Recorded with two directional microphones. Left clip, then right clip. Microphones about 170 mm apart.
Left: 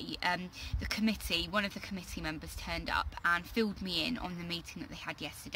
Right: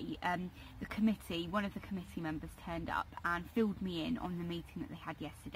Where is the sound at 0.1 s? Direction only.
15° left (ahead or behind).